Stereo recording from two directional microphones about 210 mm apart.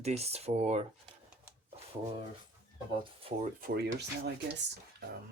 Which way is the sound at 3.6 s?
50° right (ahead or behind).